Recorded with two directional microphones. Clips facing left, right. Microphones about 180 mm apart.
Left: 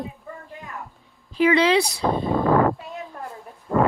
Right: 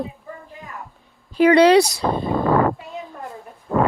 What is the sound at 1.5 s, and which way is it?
Speech, 90° right.